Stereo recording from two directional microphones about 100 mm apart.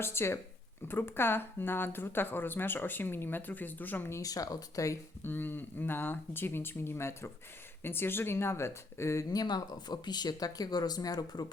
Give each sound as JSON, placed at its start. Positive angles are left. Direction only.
{"t": 0.0, "sound": "speech", "side_deg": 25}
{"t": 4.2, "sound": "speech", "side_deg": 35}
{"t": 5.2, "sound": "speech", "side_deg": 20}